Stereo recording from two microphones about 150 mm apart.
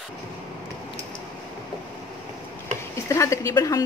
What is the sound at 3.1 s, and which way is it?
Speech, 20° left (ahead or behind).